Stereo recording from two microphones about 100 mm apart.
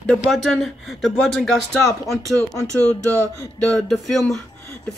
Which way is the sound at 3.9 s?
5° left (ahead or behind).